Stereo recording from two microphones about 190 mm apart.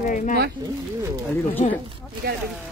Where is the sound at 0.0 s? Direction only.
45° left (ahead or behind).